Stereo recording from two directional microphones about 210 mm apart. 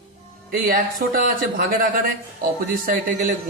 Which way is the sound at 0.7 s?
45° right (ahead or behind).